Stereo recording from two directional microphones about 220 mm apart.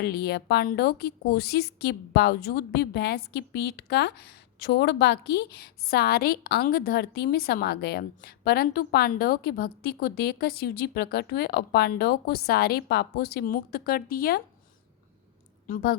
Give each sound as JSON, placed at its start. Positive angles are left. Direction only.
{"t": 0.0, "sound": "speech", "side_deg": 45}
{"t": 15.6, "sound": "a woman's voice", "side_deg": 40}